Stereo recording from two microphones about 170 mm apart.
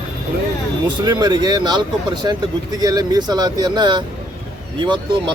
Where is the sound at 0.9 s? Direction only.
25° right (ahead or behind).